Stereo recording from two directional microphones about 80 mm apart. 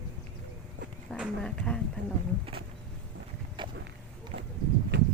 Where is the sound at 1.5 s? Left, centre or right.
Centre.